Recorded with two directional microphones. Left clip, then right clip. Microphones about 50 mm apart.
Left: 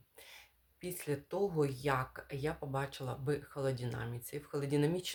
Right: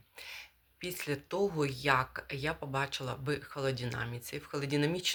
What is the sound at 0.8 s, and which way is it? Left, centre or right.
Speech, left.